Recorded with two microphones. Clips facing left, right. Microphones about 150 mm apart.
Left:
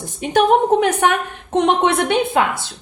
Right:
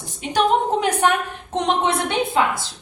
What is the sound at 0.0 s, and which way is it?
A woman's voice, 55° left (ahead or behind).